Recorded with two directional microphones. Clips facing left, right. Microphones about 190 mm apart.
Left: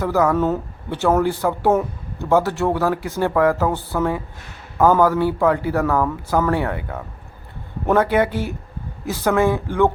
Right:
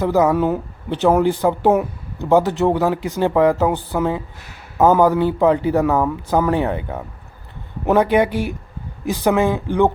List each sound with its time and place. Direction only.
0.0 s a man's voice: 20° right (ahead or behind)